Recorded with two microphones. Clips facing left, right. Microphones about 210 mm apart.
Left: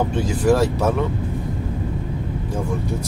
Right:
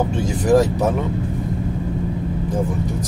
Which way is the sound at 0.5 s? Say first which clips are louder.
Right 2 dB; 15° right (ahead or behind).